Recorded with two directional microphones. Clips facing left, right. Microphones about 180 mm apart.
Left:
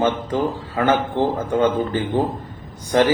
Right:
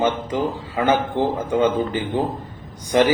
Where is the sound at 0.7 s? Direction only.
15° right (ahead or behind).